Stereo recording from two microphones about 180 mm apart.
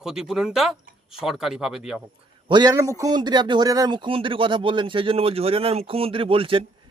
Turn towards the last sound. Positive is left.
turn(degrees=-30)  # may be behind; listen again after turning